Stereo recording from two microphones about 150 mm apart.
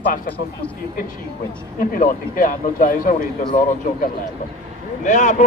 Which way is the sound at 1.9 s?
65° left (ahead or behind).